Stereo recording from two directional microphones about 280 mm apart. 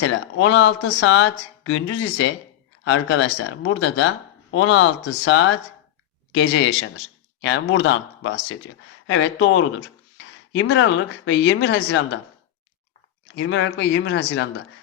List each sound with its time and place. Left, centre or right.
0.0 s speech: left
13.3 s speech: left